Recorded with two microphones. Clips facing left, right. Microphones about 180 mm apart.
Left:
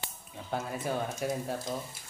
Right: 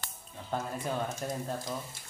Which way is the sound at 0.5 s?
10° left (ahead or behind).